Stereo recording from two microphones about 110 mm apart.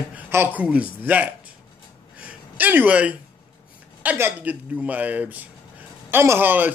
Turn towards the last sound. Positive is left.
turn(degrees=-15)  # may be behind; listen again after turning